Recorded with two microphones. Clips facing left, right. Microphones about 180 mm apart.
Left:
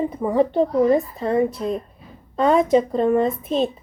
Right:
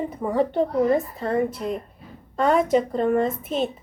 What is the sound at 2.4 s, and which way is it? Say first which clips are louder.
Speech: left 3 dB; 20° left (ahead or behind).